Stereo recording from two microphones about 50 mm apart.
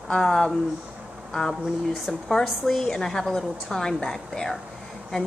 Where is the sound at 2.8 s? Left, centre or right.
Centre.